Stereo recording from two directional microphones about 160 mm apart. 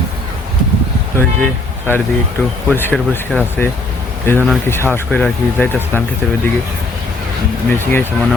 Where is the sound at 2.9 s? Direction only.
Centre (ahead or behind).